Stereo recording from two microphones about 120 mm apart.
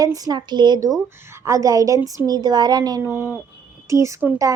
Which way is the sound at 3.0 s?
20° right (ahead or behind).